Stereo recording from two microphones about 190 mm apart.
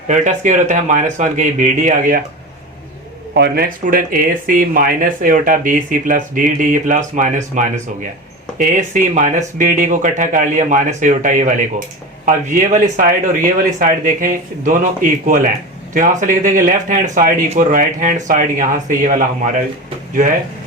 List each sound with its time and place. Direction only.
0.1 s speech: 40° right (ahead or behind)
3.3 s speech: 55° right (ahead or behind)